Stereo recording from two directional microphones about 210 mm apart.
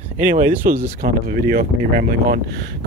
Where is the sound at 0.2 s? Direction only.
40° right (ahead or behind).